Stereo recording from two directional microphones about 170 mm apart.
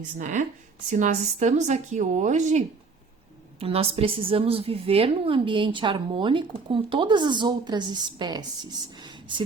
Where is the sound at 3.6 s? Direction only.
35° right (ahead or behind).